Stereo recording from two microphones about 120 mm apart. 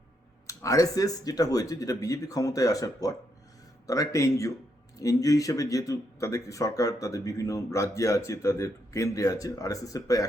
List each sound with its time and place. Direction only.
0.4 s speech: 25° left (ahead or behind)